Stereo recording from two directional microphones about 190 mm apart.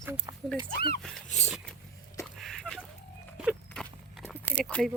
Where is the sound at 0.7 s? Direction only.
55° left (ahead or behind).